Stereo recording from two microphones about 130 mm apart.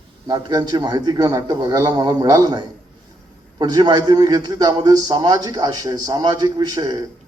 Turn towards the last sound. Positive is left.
turn(degrees=-30)  # may be behind; listen again after turning